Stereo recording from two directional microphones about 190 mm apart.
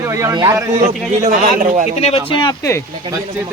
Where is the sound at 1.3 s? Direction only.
40° right (ahead or behind).